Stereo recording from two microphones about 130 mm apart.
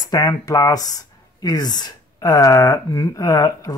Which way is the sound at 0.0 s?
30° left (ahead or behind).